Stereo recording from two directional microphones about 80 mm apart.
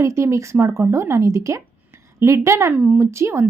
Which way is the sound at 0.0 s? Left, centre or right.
Right.